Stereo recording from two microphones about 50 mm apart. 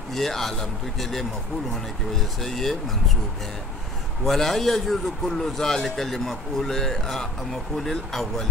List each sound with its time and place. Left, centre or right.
0.1 s a man's voice: centre
2.4 s a man's voice: centre
4.2 s a man's voice: centre